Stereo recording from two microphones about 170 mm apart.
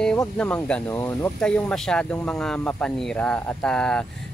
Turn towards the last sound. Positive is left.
turn(degrees=5)  # may be behind; listen again after turning